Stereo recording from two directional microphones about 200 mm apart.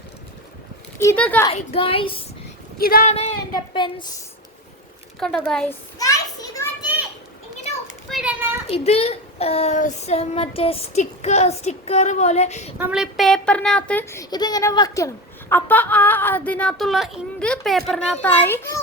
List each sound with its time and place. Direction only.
0.9 s a woman's voice: 10° left (ahead or behind)
1.5 s speech: 30° left (ahead or behind)
2.7 s speech: 45° left (ahead or behind)
3.1 s a woman's voice: 30° left (ahead or behind)
5.2 s speech: centre (ahead or behind)
6.0 s children playing: 15° left (ahead or behind)
8.1 s children playing: 5° right (ahead or behind)
8.6 s a woman's voice: 30° left (ahead or behind)
12.8 s a woman's voice: 5° right (ahead or behind)